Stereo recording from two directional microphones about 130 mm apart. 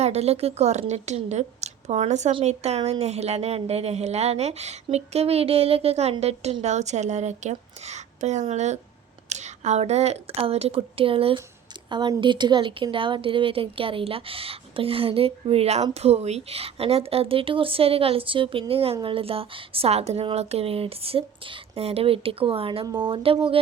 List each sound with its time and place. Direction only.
0.0 s a woman's voice: 55° right (ahead or behind)